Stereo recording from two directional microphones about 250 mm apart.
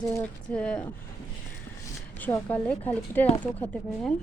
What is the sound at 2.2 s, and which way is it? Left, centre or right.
A woman's voice, centre.